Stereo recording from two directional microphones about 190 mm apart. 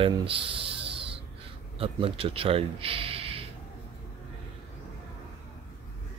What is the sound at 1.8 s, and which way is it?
Speech, 30° right (ahead or behind).